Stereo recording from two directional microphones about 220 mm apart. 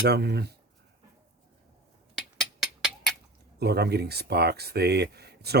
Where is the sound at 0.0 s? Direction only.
50° right (ahead or behind).